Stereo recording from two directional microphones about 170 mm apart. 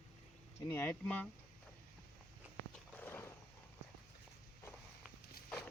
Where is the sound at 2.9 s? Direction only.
10° left (ahead or behind).